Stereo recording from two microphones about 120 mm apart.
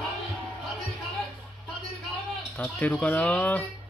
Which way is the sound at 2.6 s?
15° left (ahead or behind).